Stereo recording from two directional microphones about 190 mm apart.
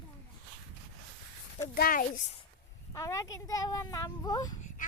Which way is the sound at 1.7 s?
50° left (ahead or behind).